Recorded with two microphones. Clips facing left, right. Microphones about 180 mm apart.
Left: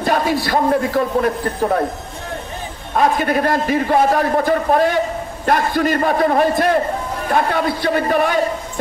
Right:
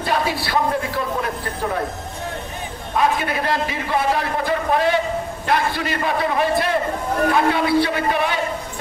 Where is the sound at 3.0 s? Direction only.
45° left (ahead or behind).